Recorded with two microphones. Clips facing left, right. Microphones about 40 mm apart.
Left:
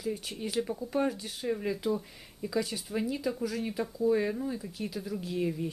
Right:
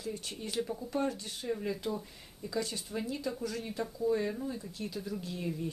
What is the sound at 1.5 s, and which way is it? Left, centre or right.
Speech, centre.